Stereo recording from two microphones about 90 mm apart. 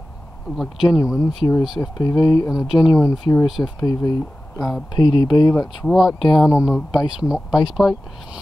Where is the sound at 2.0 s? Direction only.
45° left (ahead or behind).